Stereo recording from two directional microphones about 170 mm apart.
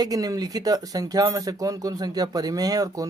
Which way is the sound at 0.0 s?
20° right (ahead or behind).